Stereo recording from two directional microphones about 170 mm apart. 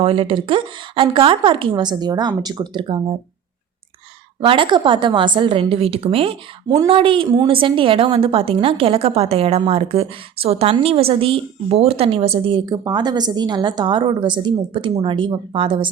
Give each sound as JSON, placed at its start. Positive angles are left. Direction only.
{"t": 0.0, "sound": "speech", "side_deg": -30}
{"t": 4.4, "sound": "a woman's voice", "side_deg": -30}